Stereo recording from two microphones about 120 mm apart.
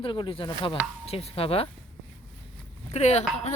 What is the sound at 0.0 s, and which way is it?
Speech, 45° left (ahead or behind).